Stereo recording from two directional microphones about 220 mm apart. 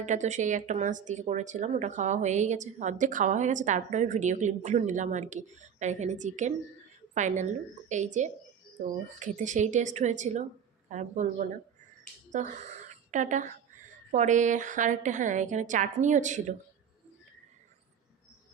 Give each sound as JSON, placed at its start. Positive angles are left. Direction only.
{"t": 0.0, "sound": "a woman's voice", "side_deg": -35}